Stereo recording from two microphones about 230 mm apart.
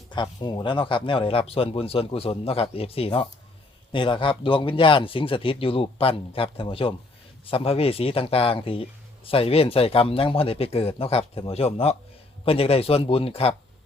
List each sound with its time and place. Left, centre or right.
0.1 s speech: centre